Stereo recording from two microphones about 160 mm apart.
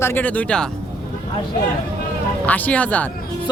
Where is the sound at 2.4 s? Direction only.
10° left (ahead or behind).